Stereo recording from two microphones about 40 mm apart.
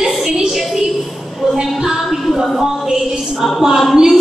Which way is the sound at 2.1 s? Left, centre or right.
Centre.